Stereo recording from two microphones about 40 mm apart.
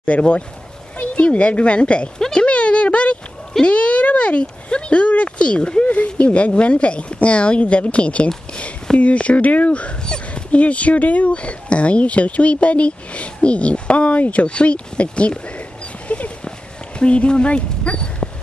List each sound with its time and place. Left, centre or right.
0.0 s speech: left
2.3 s a sound: left
6.0 s speech: left
16.1 s dog: left
17.0 s speech: left